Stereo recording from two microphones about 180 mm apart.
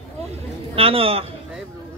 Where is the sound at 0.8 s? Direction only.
30° right (ahead or behind).